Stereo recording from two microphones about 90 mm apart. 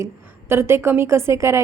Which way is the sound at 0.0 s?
30° right (ahead or behind).